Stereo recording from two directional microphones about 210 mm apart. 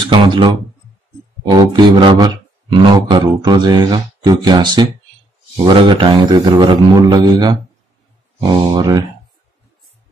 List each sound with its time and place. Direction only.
0.0 s speech: 20° right (ahead or behind)